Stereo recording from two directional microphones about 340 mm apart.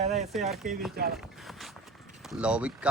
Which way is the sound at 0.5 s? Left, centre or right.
Centre.